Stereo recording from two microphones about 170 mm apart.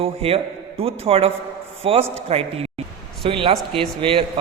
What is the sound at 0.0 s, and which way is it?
A man's voice, 35° right (ahead or behind).